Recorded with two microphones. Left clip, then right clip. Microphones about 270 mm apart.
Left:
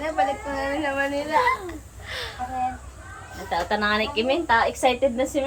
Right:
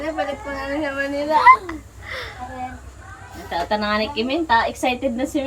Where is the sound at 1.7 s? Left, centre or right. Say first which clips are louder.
Right 4 dB; centre.